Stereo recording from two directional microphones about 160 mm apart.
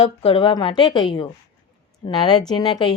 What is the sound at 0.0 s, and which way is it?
A woman's voice, 40° left (ahead or behind).